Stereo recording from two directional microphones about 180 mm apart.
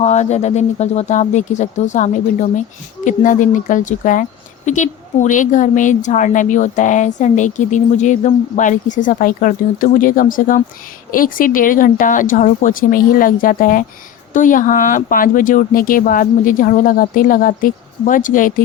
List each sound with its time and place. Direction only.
0.0 s speech: 40° left (ahead or behind)